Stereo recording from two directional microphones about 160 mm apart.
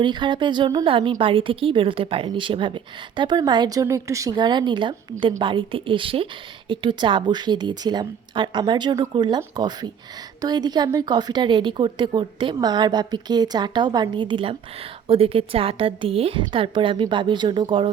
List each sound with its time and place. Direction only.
0.0 s a woman's voice: 30° right (ahead or behind)